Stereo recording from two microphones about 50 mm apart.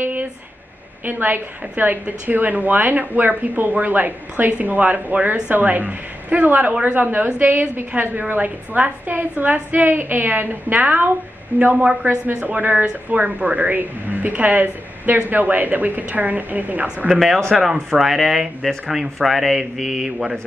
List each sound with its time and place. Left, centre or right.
0.0 s a sound: right
1.0 s speech: right
11.8 s a woman's voice: centre
12.4 s speech: right
17.1 s speech: centre